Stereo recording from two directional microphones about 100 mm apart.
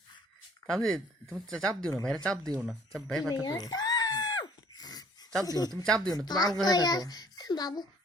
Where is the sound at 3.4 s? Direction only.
40° left (ahead or behind).